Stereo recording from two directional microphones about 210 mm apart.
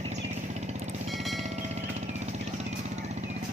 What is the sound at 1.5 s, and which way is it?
Vehicle, 35° right (ahead or behind).